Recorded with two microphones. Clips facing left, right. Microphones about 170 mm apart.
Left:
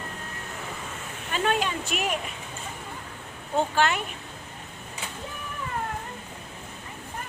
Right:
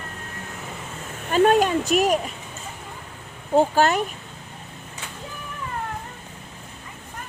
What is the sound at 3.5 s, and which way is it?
Speech, 40° right (ahead or behind).